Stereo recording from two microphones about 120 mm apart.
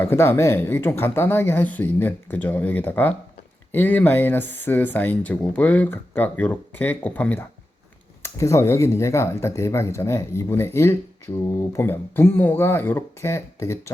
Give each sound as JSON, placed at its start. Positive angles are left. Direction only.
{"t": 0.0, "sound": "speech", "side_deg": 20}
{"t": 8.2, "sound": "speech", "side_deg": 25}